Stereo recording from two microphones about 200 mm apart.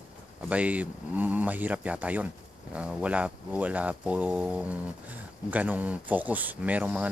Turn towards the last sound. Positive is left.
turn(degrees=-5)  # may be behind; listen again after turning